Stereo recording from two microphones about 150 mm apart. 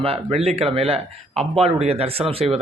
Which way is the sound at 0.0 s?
40° right (ahead or behind).